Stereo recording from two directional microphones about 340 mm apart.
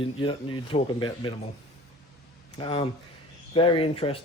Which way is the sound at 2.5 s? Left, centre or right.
Centre.